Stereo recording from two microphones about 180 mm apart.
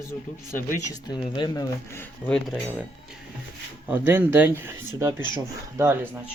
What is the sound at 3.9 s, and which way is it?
Speech, 10° right (ahead or behind).